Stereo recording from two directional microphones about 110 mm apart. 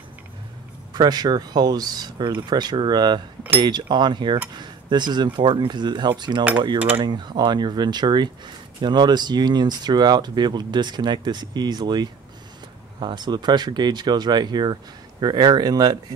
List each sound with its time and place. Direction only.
0.9 s speech: 40° right (ahead or behind)